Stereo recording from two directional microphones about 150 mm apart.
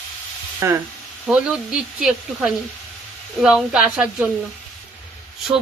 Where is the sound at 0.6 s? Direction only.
20° right (ahead or behind).